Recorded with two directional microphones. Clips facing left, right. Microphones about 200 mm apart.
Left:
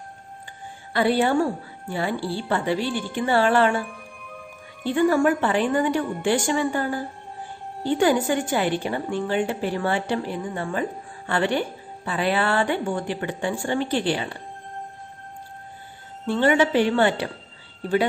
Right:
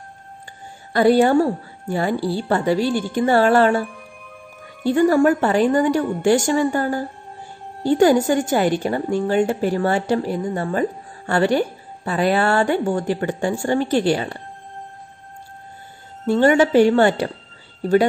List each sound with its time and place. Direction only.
0.9 s a woman's voice: 45° right (ahead or behind)
4.8 s a woman's voice: 40° right (ahead or behind)
16.3 s a woman's voice: 45° right (ahead or behind)